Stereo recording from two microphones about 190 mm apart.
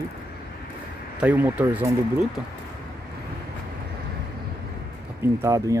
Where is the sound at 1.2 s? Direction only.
10° right (ahead or behind).